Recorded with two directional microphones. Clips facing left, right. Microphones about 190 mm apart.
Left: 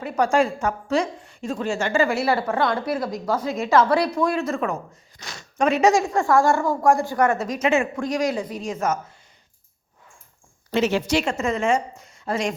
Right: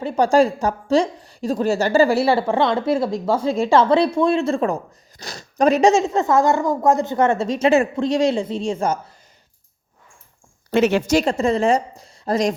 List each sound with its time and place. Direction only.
0.0 s a woman's voice: 30° right (ahead or behind)
5.9 s a woman's voice: 20° right (ahead or behind)
10.7 s a woman's voice: 55° right (ahead or behind); by 12.5 s 35° right (ahead or behind)